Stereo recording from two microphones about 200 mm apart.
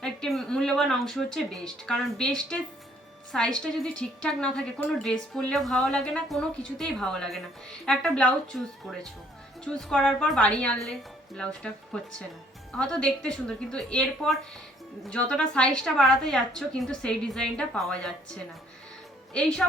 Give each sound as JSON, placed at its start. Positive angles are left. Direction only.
{"t": 0.0, "sound": "a woman's voice", "side_deg": 0}
{"t": 12.7, "sound": "a woman's voice", "side_deg": 5}
{"t": 19.3, "sound": "a woman's voice", "side_deg": 5}